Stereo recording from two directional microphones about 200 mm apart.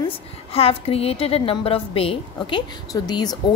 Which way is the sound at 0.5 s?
30° left (ahead or behind).